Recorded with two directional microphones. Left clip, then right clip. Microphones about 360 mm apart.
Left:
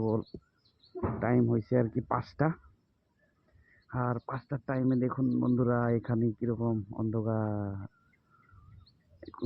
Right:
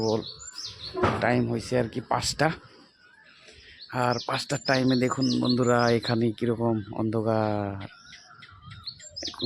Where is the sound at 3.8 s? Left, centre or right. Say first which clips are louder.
Right 8 dB; centre.